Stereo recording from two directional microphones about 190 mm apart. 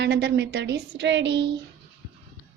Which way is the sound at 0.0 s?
65° right (ahead or behind).